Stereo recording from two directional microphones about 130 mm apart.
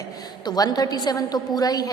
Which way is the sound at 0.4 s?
30° left (ahead or behind).